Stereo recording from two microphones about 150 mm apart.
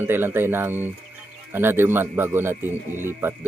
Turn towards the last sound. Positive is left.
turn(degrees=-15)  # may be behind; listen again after turning